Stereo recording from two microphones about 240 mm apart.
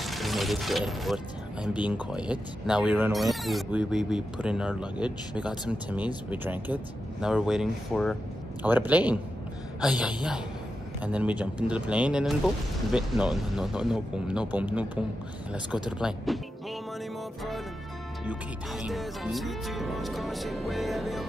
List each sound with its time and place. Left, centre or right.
0.0 s speech: centre
18.2 s speech: centre